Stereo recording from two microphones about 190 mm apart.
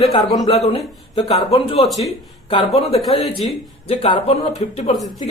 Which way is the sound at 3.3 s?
Centre (ahead or behind).